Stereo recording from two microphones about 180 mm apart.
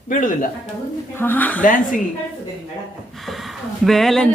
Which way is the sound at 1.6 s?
45° left (ahead or behind).